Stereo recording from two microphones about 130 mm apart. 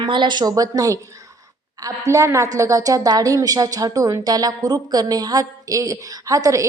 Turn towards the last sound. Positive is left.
turn(degrees=-25)  # may be behind; listen again after turning